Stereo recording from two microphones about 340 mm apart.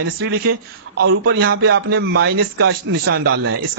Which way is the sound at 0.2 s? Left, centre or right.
Right.